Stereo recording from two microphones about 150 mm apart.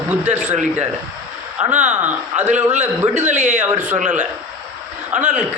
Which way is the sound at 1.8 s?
10° right (ahead or behind).